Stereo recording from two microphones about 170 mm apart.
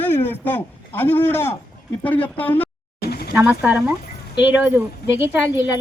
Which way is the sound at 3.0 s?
65° left (ahead or behind).